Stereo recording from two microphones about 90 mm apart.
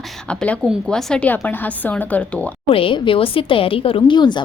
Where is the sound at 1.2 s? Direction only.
20° left (ahead or behind).